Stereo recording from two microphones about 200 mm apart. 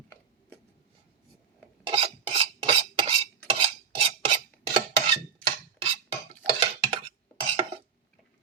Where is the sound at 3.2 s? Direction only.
30° right (ahead or behind).